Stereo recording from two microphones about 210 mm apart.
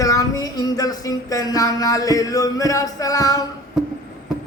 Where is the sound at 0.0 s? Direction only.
15° left (ahead or behind).